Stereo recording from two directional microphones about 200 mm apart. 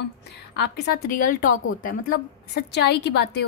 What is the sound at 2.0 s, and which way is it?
A woman's voice, 55° left (ahead or behind).